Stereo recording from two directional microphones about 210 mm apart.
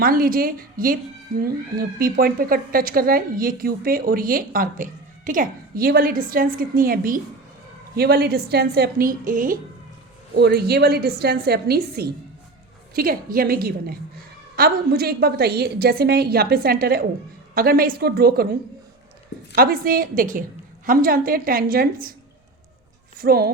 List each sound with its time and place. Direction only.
0.0 s speech: 45° right (ahead or behind)
10.3 s speech: 50° right (ahead or behind)
19.5 s speech: 45° right (ahead or behind)
23.1 s speech: 45° right (ahead or behind)